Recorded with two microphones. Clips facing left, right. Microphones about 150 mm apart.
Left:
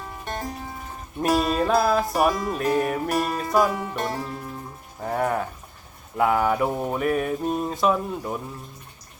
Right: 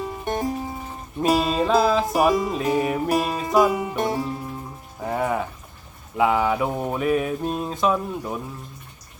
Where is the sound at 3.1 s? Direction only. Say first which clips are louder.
Right 2 dB; 15° right (ahead or behind).